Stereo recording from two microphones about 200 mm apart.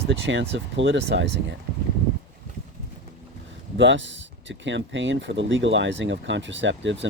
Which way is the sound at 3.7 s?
65° right (ahead or behind).